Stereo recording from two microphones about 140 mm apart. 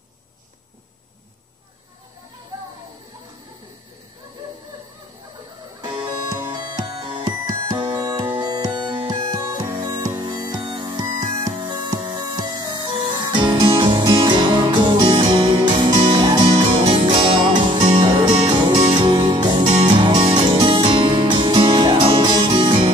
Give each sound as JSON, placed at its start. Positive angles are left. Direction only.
{"t": 6.8, "sound": "music", "side_deg": -35}
{"t": 20.3, "sound": "music", "side_deg": -40}